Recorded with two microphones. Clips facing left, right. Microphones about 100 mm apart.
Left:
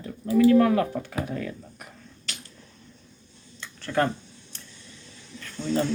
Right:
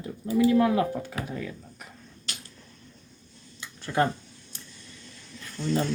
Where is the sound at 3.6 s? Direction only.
15° right (ahead or behind).